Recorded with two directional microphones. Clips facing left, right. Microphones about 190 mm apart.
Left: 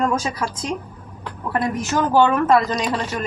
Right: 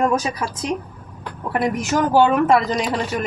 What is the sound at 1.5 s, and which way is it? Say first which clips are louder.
Speech: right 2 dB; 15° right (ahead or behind).